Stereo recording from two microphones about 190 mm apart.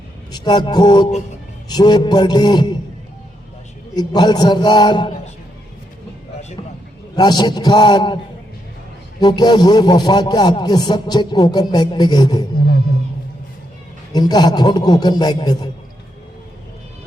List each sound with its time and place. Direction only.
0.3 s a man's voice: 20° left (ahead or behind)
3.9 s a man's voice: 20° left (ahead or behind)
7.2 s a man's voice: 20° left (ahead or behind)
9.2 s a man's voice: 20° left (ahead or behind)
12.5 s a sound: 50° left (ahead or behind)
14.1 s a man's voice: 20° left (ahead or behind)